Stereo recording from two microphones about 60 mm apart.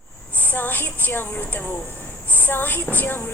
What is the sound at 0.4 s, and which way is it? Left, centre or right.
A woman's voice, left.